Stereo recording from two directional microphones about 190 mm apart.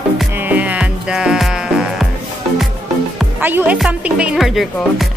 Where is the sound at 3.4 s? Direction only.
10° right (ahead or behind).